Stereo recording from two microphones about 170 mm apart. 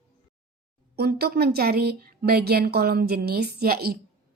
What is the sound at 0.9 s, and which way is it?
A woman's voice, 70° right (ahead or behind).